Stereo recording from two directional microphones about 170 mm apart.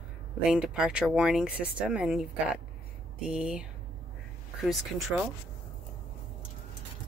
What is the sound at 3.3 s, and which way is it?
Speech, 5° right (ahead or behind).